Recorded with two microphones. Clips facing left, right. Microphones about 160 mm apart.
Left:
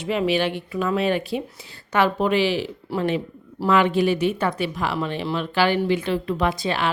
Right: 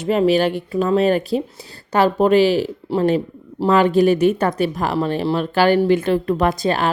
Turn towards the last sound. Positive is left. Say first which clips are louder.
# right 5 dB
turn(degrees=-45)  # may be behind; listen again after turning